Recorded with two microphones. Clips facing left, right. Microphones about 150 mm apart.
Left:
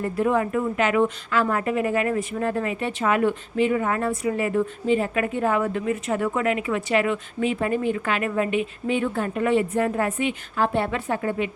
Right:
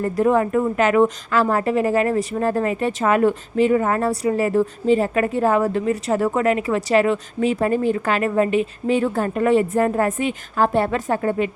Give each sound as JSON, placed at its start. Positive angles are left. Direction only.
{"t": 0.0, "sound": "a woman's voice", "side_deg": -40}